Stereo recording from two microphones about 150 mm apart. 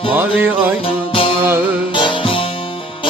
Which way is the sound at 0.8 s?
35° left (ahead or behind).